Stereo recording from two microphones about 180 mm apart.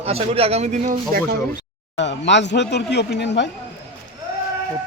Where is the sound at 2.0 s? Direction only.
75° left (ahead or behind).